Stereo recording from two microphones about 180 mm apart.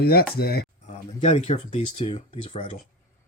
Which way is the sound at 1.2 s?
35° left (ahead or behind).